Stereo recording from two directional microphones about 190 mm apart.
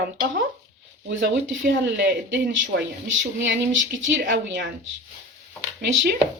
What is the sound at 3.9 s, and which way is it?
Speech, 75° right (ahead or behind).